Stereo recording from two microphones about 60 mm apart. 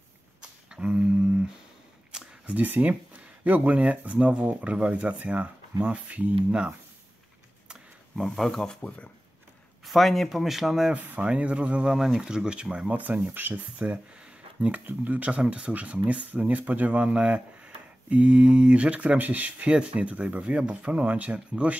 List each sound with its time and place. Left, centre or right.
0.4 s a sound: centre
2.4 s speech: right
8.2 s speech: centre
8.8 s speech: centre
9.8 s speech: centre
11.2 s speech: centre
11.9 s speech: centre
12.9 s speech: right
13.8 s a sound: right
14.9 s speech: right